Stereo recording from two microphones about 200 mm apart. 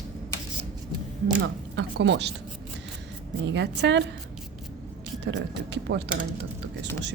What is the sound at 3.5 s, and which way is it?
Speech, 60° right (ahead or behind).